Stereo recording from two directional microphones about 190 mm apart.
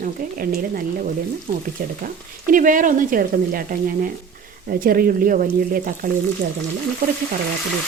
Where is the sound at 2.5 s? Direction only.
45° right (ahead or behind).